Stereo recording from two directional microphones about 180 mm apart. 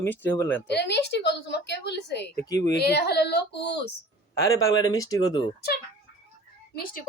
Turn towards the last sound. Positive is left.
turn(degrees=55)  # may be behind; listen again after turning